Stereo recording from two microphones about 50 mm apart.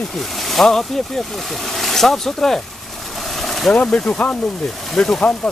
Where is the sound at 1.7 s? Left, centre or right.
Centre.